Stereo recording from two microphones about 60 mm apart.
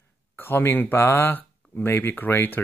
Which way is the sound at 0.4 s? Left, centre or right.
Left.